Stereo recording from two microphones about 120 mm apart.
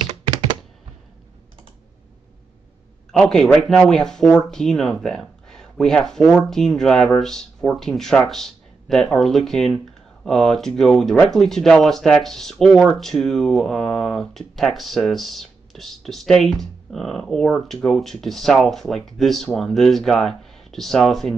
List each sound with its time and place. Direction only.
3.1 s speech: 5° left (ahead or behind)